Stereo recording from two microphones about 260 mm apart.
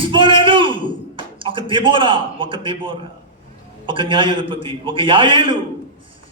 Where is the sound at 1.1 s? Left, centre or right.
Centre.